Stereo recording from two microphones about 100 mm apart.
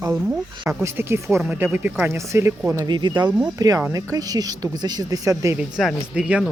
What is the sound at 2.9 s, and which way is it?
A man's voice, 50° right (ahead or behind).